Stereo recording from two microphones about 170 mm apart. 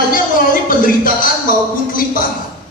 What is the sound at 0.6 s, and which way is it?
Speech, 55° left (ahead or behind).